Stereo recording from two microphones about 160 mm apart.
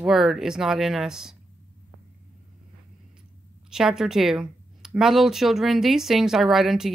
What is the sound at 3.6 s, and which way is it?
Speech, 5° right (ahead or behind).